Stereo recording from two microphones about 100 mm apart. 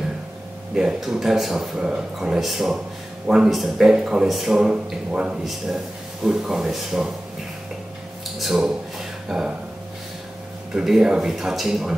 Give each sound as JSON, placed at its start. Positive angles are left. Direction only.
{"t": 0.7, "sound": "a man's voice", "side_deg": -5}
{"t": 8.4, "sound": "a man's voice", "side_deg": -5}
{"t": 10.7, "sound": "a man's voice", "side_deg": -5}